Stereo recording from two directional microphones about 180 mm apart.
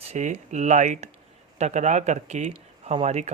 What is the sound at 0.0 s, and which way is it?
Speech, 40° right (ahead or behind).